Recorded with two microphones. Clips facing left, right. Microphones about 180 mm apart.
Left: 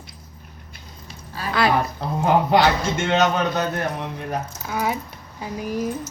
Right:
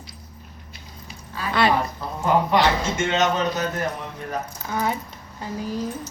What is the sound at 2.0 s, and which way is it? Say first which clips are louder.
A man's voice: left 2 dB; 65° left (ahead or behind).